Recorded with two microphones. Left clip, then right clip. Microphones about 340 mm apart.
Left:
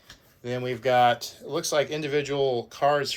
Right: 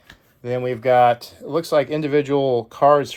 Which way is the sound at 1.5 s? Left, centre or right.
Centre.